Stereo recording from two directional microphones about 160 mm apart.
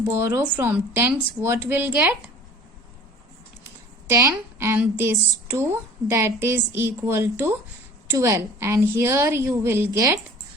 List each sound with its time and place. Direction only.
0.0 s speech: 15° right (ahead or behind)
4.1 s speech: 20° right (ahead or behind)